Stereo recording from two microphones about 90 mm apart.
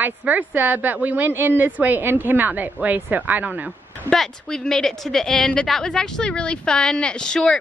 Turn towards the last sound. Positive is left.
turn(degrees=10)  # may be behind; listen again after turning